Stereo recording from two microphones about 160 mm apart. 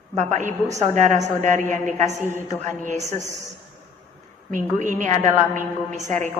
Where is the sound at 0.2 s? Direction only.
50° right (ahead or behind).